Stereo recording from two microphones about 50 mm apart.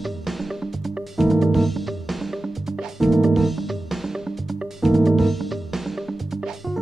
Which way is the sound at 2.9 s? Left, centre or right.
Centre.